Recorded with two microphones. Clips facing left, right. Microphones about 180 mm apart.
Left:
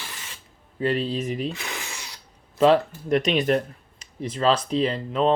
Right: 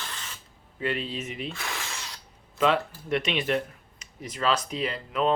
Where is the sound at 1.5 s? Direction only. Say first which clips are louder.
Left 2 dB; 15° left (ahead or behind).